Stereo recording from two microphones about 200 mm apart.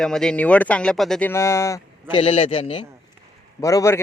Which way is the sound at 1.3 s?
15° left (ahead or behind).